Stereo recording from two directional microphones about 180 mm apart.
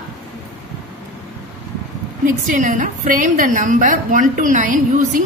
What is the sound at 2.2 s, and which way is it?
A woman's voice, 45° right (ahead or behind).